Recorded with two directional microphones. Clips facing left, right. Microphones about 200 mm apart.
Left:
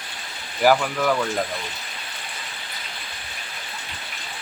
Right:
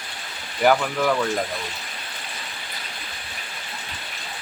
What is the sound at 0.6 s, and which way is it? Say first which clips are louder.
Speech: even; 5° left (ahead or behind).